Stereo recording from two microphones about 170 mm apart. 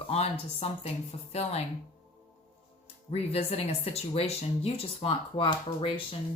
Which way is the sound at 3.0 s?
40° left (ahead or behind).